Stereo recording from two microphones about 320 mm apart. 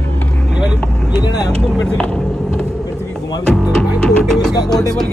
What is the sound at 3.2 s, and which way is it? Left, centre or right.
Speech, centre.